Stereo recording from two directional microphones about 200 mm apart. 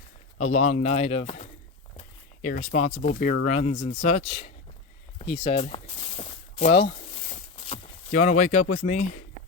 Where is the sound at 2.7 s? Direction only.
35° left (ahead or behind).